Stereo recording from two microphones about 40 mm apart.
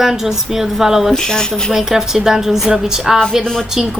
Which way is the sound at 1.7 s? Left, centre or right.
Centre.